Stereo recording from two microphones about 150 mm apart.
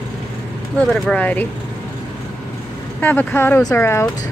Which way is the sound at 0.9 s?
10° left (ahead or behind).